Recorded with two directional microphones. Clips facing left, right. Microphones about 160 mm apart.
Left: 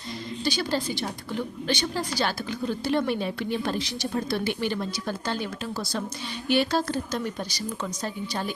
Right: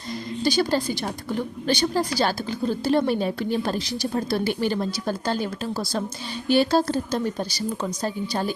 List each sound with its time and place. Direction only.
0.4 s a woman's voice: 40° right (ahead or behind)